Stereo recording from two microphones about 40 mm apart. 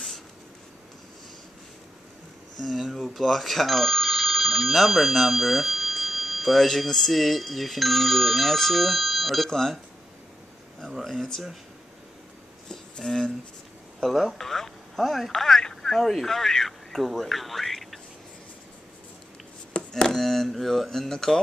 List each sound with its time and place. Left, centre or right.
2.5 s speech: centre
9.5 s speech: centre
12.6 s a sound: centre
13.9 s speech: centre
19.7 s a sound: left
20.1 s speech: centre